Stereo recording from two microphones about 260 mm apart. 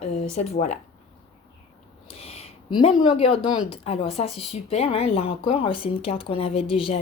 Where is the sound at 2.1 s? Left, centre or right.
Left.